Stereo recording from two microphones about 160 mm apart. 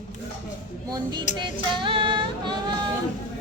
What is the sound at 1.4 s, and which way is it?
Female singing, 30° right (ahead or behind).